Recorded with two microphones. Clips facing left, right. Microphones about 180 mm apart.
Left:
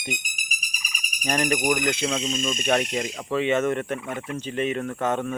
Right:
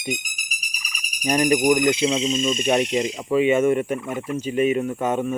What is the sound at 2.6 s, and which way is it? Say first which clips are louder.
Speech: right 2 dB; 20° right (ahead or behind).